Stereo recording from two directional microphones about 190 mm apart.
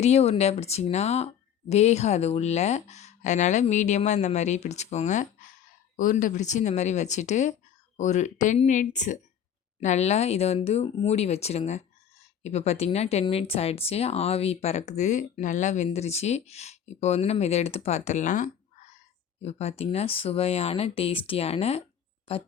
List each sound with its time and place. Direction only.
0.0 s speech: 35° left (ahead or behind)